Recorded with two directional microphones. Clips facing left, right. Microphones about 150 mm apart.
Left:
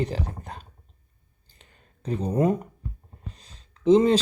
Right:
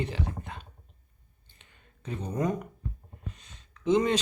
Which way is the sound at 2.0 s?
35° left (ahead or behind).